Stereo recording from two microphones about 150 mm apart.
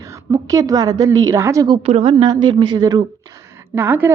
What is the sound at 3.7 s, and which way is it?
Speech, 15° right (ahead or behind).